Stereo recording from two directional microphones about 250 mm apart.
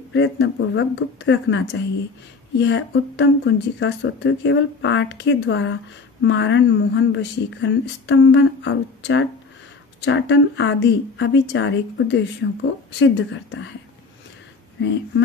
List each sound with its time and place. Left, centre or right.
0.1 s speech: left
14.8 s speech: left